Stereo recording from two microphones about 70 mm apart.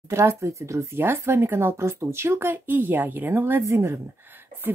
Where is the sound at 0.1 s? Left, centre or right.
Right.